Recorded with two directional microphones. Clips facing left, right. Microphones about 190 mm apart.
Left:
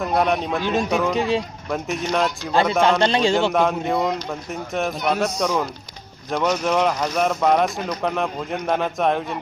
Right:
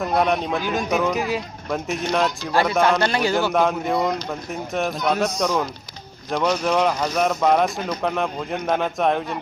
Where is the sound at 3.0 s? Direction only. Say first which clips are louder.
Left 3 dB; 25° left (ahead or behind).